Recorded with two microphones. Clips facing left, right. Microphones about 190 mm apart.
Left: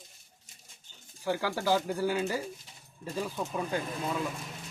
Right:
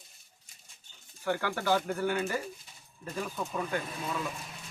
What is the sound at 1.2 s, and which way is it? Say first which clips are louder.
Speech: left 1 dB; 10° left (ahead or behind).